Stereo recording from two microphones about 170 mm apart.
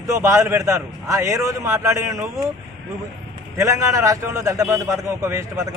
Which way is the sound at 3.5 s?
20° right (ahead or behind).